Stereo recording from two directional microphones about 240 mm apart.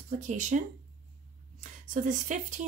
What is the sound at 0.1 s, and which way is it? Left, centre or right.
Speech, right.